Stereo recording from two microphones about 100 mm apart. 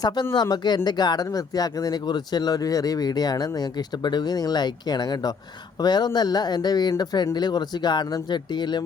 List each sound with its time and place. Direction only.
0.3 s speech: 45° left (ahead or behind)